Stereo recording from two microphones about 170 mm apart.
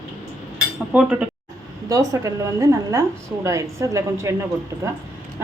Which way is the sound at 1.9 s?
20° right (ahead or behind).